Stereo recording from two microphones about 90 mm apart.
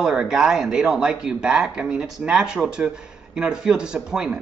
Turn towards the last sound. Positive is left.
turn(degrees=-10)  # may be behind; listen again after turning